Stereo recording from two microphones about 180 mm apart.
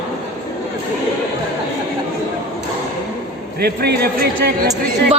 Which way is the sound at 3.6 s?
60° right (ahead or behind).